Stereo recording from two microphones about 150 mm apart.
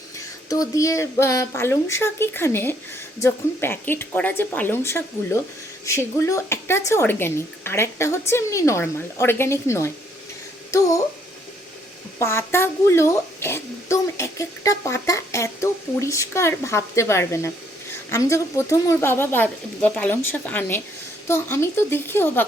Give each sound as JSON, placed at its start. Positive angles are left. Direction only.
{"t": 0.5, "sound": "a woman's voice", "side_deg": 20}
{"t": 12.2, "sound": "a woman's voice", "side_deg": 15}